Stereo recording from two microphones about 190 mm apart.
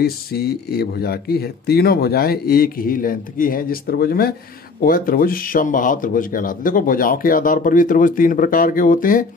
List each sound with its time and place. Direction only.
0.0 s speech: 55° left (ahead or behind)